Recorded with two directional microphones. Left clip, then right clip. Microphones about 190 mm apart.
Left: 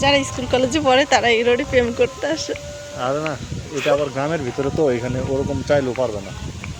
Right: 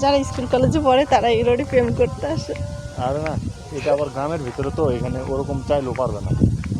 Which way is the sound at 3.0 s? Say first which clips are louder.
Left 1 dB; 55° left (ahead or behind).